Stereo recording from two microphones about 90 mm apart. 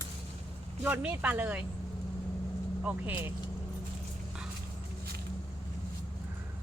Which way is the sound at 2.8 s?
20° right (ahead or behind).